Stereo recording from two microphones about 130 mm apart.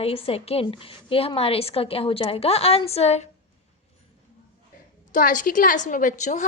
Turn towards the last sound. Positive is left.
turn(degrees=65)  # may be behind; listen again after turning